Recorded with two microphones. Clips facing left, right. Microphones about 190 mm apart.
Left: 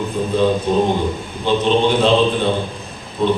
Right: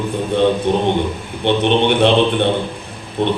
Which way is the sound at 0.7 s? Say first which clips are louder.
Even; 65° right (ahead or behind).